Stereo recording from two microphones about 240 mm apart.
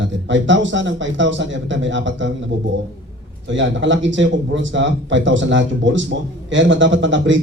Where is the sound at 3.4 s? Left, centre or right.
Right.